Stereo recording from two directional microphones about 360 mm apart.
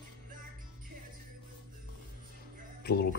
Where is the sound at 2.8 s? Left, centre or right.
Left.